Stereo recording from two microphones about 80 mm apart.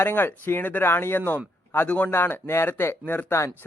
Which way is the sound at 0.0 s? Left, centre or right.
Left.